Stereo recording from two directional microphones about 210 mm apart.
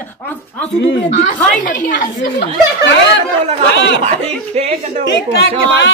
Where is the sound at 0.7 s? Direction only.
55° left (ahead or behind).